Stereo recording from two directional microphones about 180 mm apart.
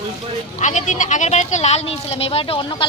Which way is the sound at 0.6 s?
40° left (ahead or behind).